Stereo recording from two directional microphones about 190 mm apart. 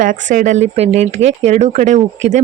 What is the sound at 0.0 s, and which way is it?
Speech, 45° right (ahead or behind).